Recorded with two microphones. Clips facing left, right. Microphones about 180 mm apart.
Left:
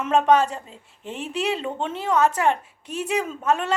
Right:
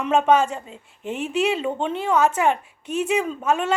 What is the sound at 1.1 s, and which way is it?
Speech, 30° left (ahead or behind).